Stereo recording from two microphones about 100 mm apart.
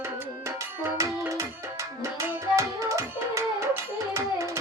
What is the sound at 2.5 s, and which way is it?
Music, 30° right (ahead or behind).